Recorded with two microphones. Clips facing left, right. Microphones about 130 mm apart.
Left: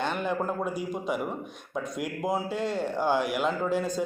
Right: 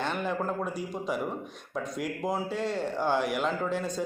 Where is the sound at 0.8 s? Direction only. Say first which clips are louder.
Left 2 dB; centre (ahead or behind).